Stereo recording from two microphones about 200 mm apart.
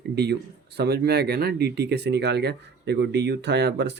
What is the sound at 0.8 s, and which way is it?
Speech, 50° right (ahead or behind).